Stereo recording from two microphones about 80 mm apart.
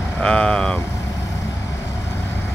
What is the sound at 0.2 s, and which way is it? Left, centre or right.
Vehicle, centre.